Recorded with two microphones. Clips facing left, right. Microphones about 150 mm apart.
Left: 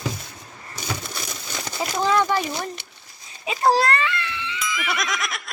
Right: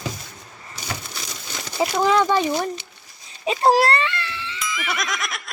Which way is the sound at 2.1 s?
15° right (ahead or behind).